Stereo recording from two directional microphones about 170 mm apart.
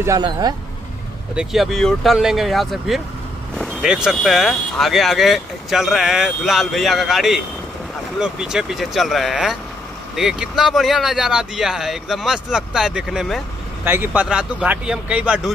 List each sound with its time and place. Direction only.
0.0 s speech: 20° right (ahead or behind)
1.3 s speech: 5° right (ahead or behind)